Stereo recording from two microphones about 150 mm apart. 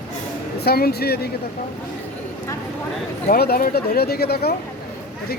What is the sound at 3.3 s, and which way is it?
Speech, 85° left.